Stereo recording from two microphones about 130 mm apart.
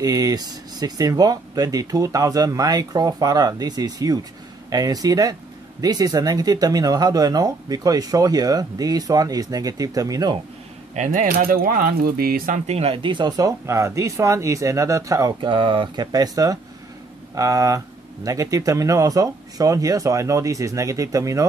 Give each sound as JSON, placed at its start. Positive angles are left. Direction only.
{"t": 0.0, "sound": "speech", "side_deg": -30}
{"t": 11.0, "sound": "speech", "side_deg": -70}
{"t": 12.4, "sound": "speech", "side_deg": -80}
{"t": 15.4, "sound": "speech", "side_deg": -40}